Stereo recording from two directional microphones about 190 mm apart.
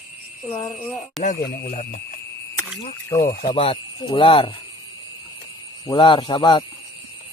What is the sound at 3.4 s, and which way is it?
Speech, 30° left (ahead or behind).